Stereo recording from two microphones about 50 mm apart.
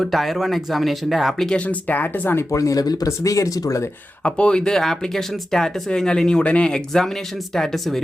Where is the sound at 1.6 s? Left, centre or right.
Left.